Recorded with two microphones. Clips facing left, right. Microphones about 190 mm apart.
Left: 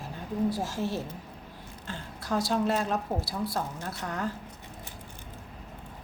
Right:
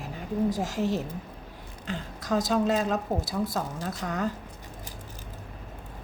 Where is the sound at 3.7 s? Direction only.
90° right.